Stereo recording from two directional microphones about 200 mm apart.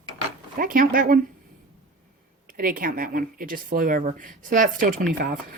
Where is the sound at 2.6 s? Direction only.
45° right (ahead or behind).